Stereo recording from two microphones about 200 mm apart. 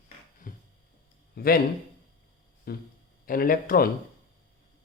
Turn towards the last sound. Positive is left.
turn(degrees=45)  # may be behind; listen again after turning